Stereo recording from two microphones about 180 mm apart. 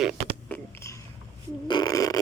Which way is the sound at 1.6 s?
25° left (ahead or behind).